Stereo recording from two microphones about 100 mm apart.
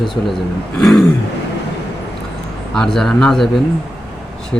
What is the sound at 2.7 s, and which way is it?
Speech, 5° left (ahead or behind).